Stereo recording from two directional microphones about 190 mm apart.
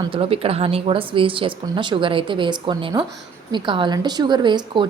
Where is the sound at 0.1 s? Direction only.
30° right (ahead or behind).